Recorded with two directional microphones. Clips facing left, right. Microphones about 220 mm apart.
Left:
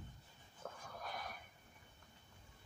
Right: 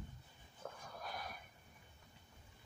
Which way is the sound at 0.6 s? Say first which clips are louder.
Even; 10° right (ahead or behind).